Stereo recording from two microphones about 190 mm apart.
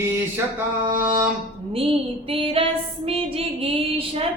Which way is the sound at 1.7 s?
30° right (ahead or behind).